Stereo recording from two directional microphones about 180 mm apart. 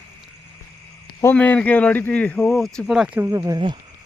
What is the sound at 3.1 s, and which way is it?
Speech, 15° right (ahead or behind).